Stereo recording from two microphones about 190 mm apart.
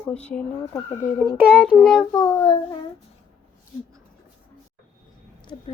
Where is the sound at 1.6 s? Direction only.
Centre (ahead or behind).